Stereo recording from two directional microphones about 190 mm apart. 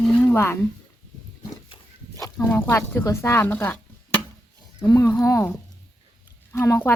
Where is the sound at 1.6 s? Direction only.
20° left (ahead or behind).